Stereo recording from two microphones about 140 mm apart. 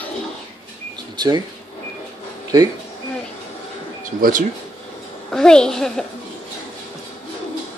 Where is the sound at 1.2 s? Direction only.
30° right (ahead or behind).